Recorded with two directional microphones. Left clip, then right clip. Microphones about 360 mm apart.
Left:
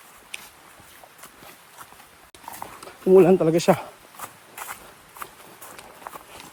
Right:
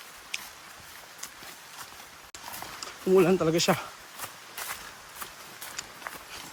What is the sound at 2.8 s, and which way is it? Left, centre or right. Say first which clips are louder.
Speech: left 7 dB; centre.